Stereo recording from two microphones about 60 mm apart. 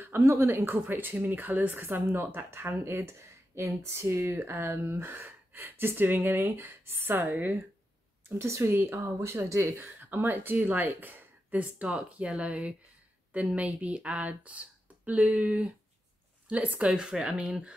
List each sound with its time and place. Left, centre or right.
0.0 s a sound: right
0.3 s a woman's voice: right
9.9 s a woman's voice: right; by 17.7 s centre